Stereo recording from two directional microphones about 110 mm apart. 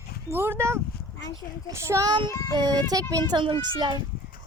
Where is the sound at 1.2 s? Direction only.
35° left (ahead or behind).